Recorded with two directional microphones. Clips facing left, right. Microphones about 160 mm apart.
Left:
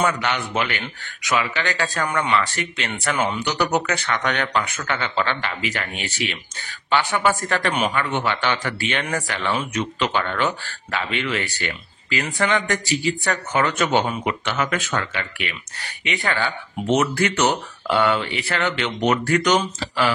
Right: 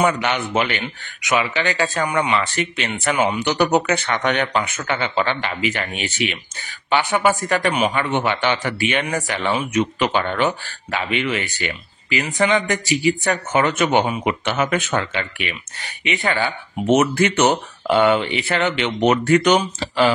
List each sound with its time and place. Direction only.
0.0 s a man's voice: 20° right (ahead or behind)